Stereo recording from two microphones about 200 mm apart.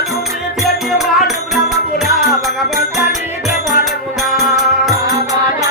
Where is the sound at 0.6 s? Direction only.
Centre (ahead or behind).